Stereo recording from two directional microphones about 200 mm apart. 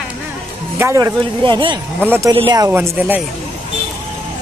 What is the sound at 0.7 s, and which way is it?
Speech, 15° right (ahead or behind).